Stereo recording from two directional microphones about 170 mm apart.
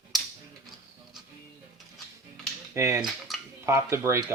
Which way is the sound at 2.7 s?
15° right (ahead or behind).